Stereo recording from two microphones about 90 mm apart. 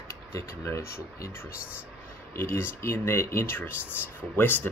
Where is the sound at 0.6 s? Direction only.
30° left (ahead or behind).